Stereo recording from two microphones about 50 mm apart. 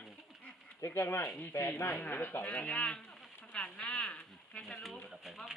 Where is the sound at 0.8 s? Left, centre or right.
Left.